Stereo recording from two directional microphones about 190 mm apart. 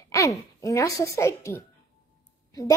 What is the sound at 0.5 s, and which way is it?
A woman's voice, 15° left (ahead or behind).